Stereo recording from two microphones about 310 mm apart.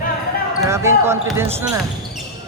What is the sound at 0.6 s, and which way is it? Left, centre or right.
Speech, centre.